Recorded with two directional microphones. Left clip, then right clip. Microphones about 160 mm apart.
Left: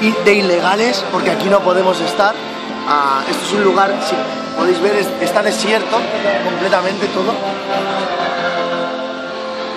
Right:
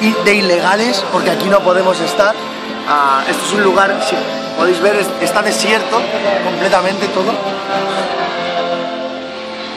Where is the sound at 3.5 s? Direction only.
15° right (ahead or behind).